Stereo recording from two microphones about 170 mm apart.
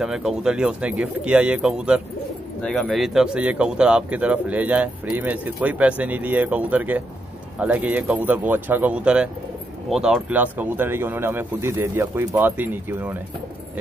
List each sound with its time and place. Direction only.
0.0 s speech: 5° right (ahead or behind)